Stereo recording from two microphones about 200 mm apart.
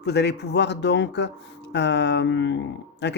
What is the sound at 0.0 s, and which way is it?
Speech, 55° left (ahead or behind).